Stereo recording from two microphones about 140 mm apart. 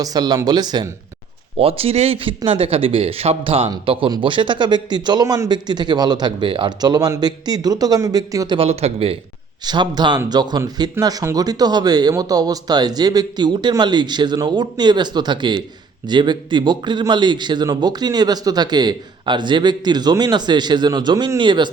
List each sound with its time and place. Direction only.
0.0 s speech: 30° right (ahead or behind)
1.5 s a man's voice: 45° right (ahead or behind); by 8.5 s 25° right (ahead or behind)
8.5 s speech: 45° right (ahead or behind)
9.6 s a man's voice: 30° right (ahead or behind)